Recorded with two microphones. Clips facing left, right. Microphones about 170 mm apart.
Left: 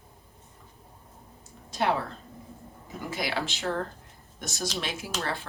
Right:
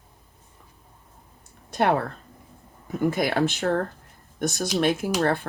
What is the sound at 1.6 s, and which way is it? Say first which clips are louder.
A woman's voice: right 5 dB; 55° right (ahead or behind).